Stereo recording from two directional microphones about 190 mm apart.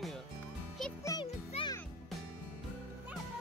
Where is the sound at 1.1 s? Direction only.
20° left (ahead or behind).